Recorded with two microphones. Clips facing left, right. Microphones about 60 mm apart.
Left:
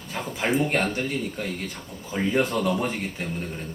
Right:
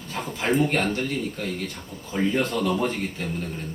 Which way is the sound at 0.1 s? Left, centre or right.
Centre.